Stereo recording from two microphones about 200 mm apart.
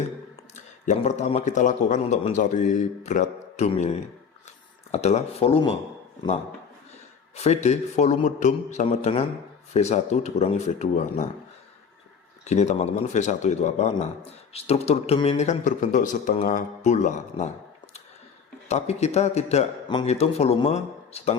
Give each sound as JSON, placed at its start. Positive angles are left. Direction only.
{"t": 0.5, "sound": "speech", "side_deg": 35}
{"t": 7.3, "sound": "speech", "side_deg": 35}
{"t": 12.5, "sound": "speech", "side_deg": 35}
{"t": 18.7, "sound": "speech", "side_deg": 35}